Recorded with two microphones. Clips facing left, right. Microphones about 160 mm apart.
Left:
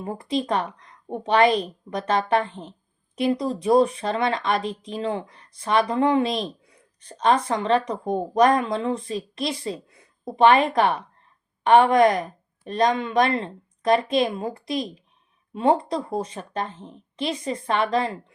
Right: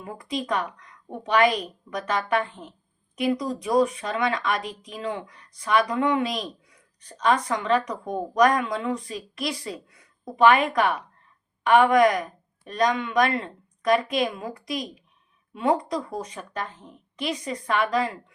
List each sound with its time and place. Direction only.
0.0 s speech: 30° left (ahead or behind)